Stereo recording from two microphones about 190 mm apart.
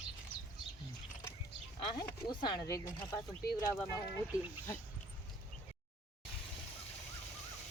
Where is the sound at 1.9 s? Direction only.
20° left (ahead or behind).